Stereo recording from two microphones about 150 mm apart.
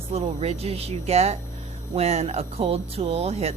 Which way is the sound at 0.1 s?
45° right (ahead or behind).